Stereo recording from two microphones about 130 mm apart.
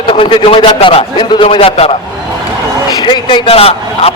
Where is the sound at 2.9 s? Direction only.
35° left (ahead or behind).